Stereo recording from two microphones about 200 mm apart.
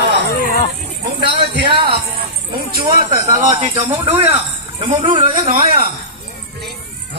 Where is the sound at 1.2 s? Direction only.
55° right (ahead or behind).